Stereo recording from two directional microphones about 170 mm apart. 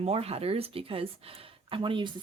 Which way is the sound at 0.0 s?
35° right (ahead or behind).